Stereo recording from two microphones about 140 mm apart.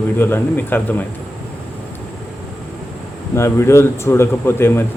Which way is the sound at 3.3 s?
20° left (ahead or behind).